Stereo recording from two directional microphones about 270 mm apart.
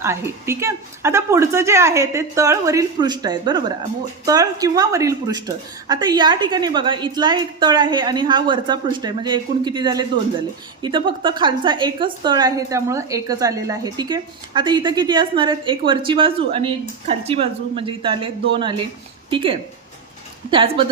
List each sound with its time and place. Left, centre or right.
0.0 s a woman's voice: centre